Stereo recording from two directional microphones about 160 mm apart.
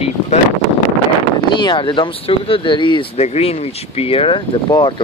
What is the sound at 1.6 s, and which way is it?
Speech, 30° left (ahead or behind).